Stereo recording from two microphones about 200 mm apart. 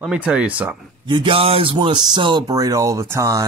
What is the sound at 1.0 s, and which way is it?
Speech, 25° right (ahead or behind).